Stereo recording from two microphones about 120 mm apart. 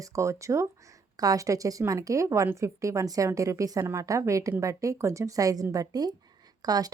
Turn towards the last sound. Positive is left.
turn(degrees=-35)  # may be behind; listen again after turning